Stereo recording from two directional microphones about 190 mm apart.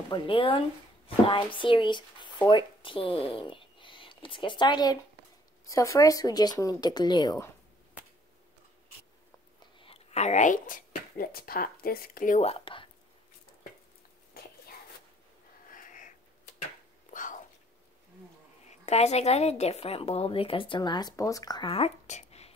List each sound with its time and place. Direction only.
0.1 s speech: 25° left (ahead or behind)
9.6 s speech: 30° left (ahead or behind)
15.7 s a sound: 45° left (ahead or behind)
17.1 s whispering: 45° left (ahead or behind)
18.7 s a woman's voice: 35° left (ahead or behind)